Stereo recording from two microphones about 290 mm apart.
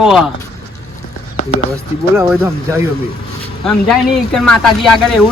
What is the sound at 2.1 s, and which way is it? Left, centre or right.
Speech, centre.